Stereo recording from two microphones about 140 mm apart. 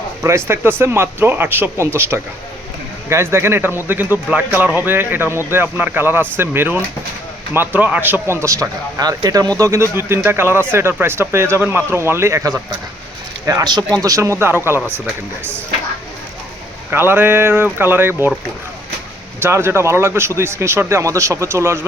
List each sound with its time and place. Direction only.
0.2 s speech: 20° right (ahead or behind)
16.9 s speech: 15° right (ahead or behind)
19.4 s speech: 15° right (ahead or behind)